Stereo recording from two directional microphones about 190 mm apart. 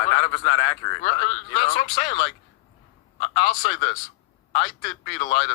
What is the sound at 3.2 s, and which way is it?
Speech, 35° left (ahead or behind).